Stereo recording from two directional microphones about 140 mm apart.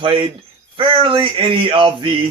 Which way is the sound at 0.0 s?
35° right (ahead or behind).